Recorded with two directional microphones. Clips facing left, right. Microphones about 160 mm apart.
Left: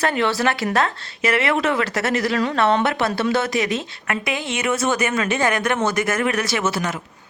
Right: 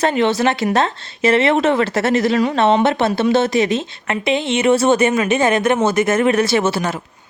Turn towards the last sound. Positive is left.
turn(degrees=-30)  # may be behind; listen again after turning